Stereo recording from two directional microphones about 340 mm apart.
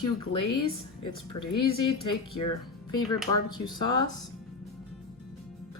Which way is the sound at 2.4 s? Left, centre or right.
Centre.